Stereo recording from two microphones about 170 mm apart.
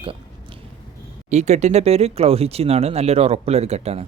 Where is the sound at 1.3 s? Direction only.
40° right (ahead or behind).